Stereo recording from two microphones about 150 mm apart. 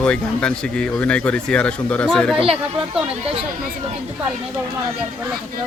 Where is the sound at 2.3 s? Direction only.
40° right (ahead or behind).